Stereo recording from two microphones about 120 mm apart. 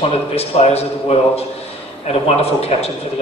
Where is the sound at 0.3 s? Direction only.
60° left (ahead or behind).